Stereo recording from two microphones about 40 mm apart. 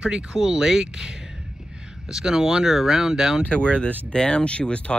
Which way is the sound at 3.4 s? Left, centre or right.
Left.